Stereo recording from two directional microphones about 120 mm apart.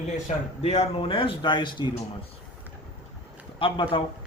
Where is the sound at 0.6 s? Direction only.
55° left (ahead or behind); by 1.9 s 40° left (ahead or behind).